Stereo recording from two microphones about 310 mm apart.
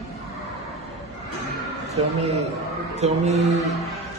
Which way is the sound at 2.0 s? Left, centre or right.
Centre.